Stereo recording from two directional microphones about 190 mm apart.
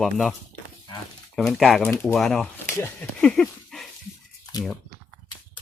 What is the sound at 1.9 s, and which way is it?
Speech, 10° left (ahead or behind).